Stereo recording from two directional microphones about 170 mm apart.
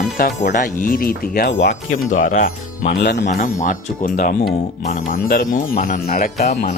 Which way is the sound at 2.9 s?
90° left.